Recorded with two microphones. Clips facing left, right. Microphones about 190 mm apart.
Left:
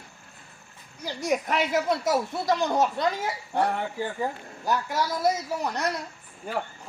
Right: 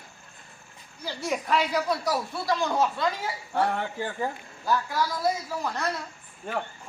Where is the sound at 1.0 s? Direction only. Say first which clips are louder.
Left 2 dB; 20° left (ahead or behind).